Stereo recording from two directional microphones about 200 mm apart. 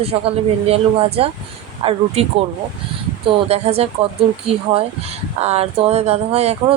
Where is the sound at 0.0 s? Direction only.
30° right (ahead or behind).